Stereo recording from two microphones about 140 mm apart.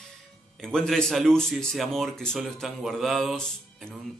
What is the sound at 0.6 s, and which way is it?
Speech, 5° left (ahead or behind).